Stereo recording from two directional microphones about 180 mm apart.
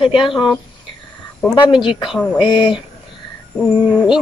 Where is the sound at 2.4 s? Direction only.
25° left (ahead or behind).